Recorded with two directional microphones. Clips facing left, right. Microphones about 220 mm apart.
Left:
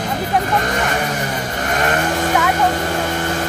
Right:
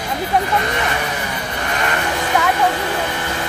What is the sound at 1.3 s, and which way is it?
Vehicle, 45° left (ahead or behind).